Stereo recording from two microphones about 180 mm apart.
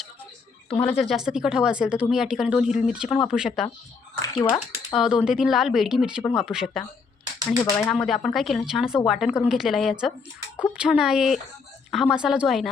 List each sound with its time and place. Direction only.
0.9 s speech: 5° right (ahead or behind)
4.2 s a sound: 20° left (ahead or behind)
4.9 s speech: 5° right (ahead or behind)
7.6 s speech: 15° left (ahead or behind)
7.9 s speech: centre (ahead or behind)